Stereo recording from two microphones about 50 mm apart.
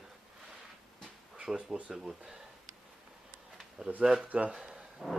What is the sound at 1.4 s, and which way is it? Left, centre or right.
Speech, centre.